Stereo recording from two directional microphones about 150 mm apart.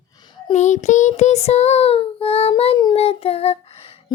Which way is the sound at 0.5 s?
55° left (ahead or behind).